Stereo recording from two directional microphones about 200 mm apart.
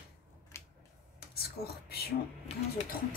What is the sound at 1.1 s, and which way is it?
Whispering, 50° left (ahead or behind).